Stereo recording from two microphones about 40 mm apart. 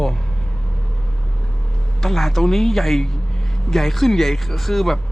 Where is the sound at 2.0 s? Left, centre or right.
Centre.